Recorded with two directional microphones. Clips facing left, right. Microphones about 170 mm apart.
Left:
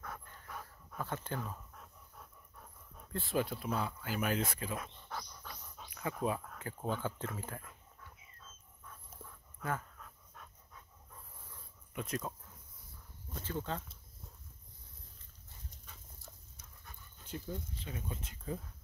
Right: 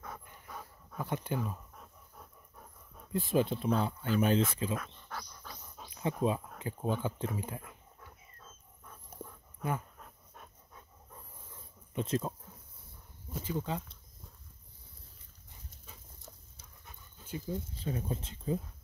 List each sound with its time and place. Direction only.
0.0 s dog: 10° right (ahead or behind)
3.1 s speech: 15° right (ahead or behind)
4.7 s a sound: 20° left (ahead or behind)
5.4 s dog: 10° right (ahead or behind)
5.9 s dog: 25° right (ahead or behind)
6.6 s speech: 15° right (ahead or behind)
9.6 s dog: 20° right (ahead or behind)
11.5 s a sound: 25° right (ahead or behind)
13.3 s speech: 10° right (ahead or behind)
15.9 s dog: 20° right (ahead or behind)
17.7 s speech: 35° right (ahead or behind)